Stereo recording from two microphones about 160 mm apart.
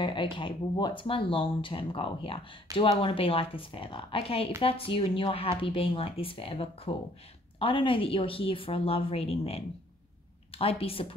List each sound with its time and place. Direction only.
0.0 s speech: 30° left (ahead or behind)